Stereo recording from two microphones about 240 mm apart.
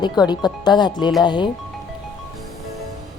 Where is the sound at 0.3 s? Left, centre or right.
Centre.